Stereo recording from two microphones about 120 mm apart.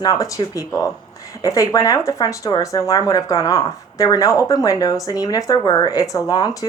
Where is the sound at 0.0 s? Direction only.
30° left (ahead or behind).